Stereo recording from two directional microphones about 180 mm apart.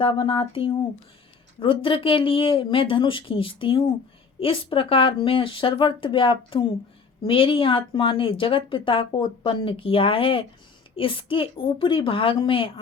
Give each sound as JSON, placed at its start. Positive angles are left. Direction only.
{"t": 0.0, "sound": "speech", "side_deg": 30}